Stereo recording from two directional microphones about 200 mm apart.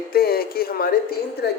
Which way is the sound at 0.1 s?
50° left (ahead or behind).